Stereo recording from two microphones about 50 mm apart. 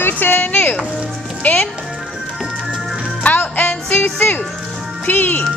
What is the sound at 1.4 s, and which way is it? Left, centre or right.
Speech, left.